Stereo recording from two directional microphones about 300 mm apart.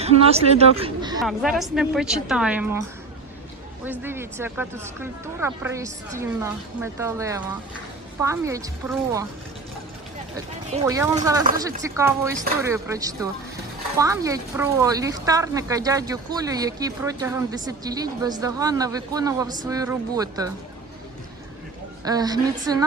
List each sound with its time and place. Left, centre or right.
0.0 s speech: right
1.2 s a woman's voice: centre
4.0 s speech: centre
10.8 s speech: centre
22.0 s speech: centre